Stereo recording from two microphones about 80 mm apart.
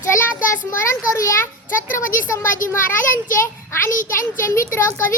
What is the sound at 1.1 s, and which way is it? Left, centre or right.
A child's voice, left.